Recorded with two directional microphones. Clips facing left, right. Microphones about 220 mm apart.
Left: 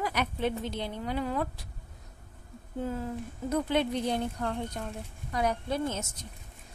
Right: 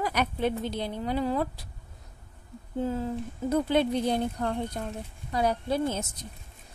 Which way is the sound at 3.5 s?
35° right (ahead or behind).